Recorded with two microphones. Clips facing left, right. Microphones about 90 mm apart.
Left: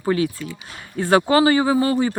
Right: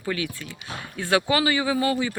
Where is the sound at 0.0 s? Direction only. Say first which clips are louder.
Left 8 dB; 35° left (ahead or behind).